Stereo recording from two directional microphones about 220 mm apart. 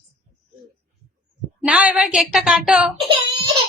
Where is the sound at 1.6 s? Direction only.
5° right (ahead or behind).